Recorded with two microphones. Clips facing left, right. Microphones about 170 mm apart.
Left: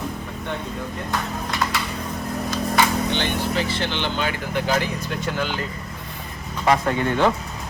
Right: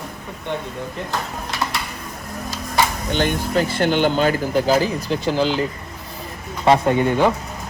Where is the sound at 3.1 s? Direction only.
45° right (ahead or behind).